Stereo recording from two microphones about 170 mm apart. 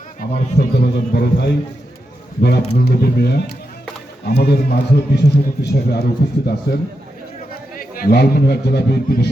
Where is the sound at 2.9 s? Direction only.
65° left (ahead or behind).